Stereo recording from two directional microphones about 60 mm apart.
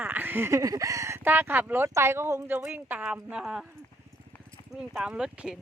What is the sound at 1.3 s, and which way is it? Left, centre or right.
Speech, right.